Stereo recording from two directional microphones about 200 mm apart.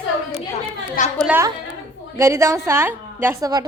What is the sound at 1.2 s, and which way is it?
A woman's voice, 10° right (ahead or behind).